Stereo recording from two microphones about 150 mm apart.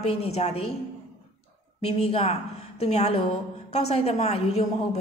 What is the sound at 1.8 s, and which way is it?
A woman's voice, 40° left (ahead or behind).